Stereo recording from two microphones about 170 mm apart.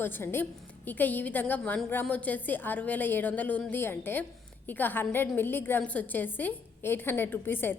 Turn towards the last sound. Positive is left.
turn(degrees=15)  # may be behind; listen again after turning